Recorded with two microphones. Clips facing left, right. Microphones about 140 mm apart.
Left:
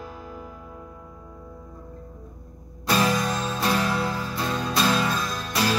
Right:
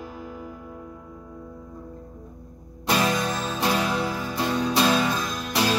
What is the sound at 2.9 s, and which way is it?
Music, 20° right (ahead or behind).